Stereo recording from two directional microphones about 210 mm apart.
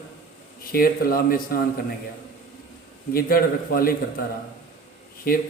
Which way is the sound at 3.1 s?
45° left (ahead or behind).